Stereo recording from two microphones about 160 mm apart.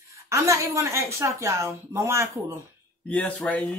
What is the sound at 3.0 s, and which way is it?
Speech, 10° left (ahead or behind).